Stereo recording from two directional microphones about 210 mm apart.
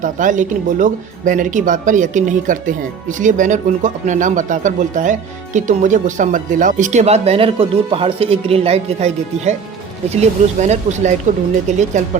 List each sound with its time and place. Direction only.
0.0 s speech: 40° right (ahead or behind)